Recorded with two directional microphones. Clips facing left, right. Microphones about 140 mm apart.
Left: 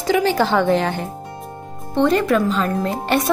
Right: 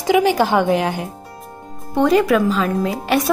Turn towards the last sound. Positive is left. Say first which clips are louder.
# right 1 dB
turn(degrees=-5)  # may be behind; listen again after turning